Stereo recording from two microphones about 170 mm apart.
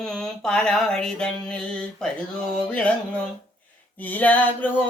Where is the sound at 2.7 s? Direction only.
5° left (ahead or behind).